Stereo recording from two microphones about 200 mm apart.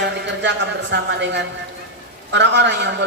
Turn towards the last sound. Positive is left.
turn(degrees=-60)  # may be behind; listen again after turning